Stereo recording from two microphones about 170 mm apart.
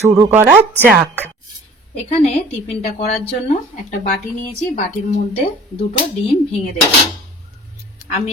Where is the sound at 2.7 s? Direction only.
40° left (ahead or behind).